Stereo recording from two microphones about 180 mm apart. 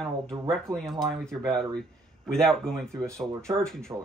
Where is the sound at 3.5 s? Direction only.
5° left (ahead or behind).